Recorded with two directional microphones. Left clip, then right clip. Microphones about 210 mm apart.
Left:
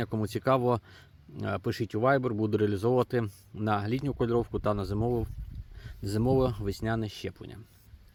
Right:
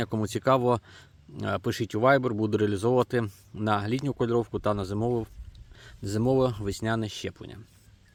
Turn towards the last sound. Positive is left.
turn(degrees=-10)  # may be behind; listen again after turning